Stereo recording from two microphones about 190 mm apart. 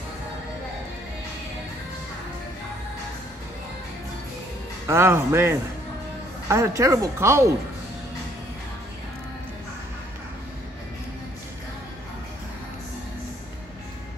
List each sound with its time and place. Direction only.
4.8 s speech: 15° right (ahead or behind)